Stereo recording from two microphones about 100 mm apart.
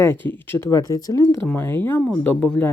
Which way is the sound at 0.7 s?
35° left (ahead or behind).